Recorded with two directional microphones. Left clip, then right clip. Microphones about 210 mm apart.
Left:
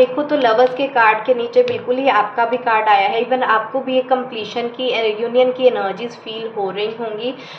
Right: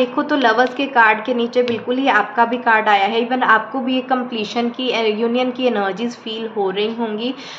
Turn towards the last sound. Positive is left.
turn(degrees=-35)  # may be behind; listen again after turning